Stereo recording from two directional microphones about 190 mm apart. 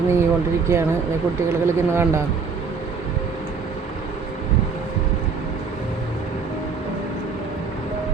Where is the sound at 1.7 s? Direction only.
15° right (ahead or behind).